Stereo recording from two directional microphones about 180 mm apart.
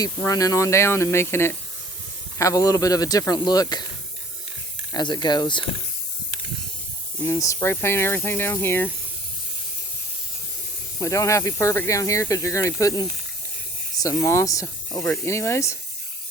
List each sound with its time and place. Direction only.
0.2 s speech: 20° left (ahead or behind)
4.9 s speech: 25° left (ahead or behind)
7.2 s speech: 15° left (ahead or behind)
11.0 s speech: 15° left (ahead or behind)